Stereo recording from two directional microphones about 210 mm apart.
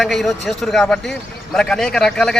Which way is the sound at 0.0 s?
Centre (ahead or behind).